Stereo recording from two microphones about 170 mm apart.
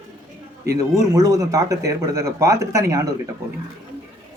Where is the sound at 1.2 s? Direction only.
20° right (ahead or behind).